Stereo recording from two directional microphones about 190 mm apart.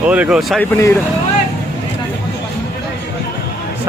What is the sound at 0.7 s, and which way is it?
Speech, 10° left (ahead or behind).